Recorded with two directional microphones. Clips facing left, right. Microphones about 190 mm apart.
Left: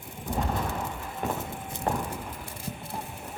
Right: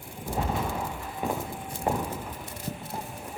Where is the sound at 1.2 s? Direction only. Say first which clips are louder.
Right 1 dB; 5° right (ahead or behind).